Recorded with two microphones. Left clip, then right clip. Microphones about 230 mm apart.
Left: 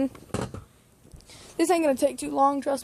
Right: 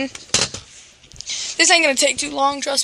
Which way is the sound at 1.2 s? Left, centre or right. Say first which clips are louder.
Right 9 dB; centre.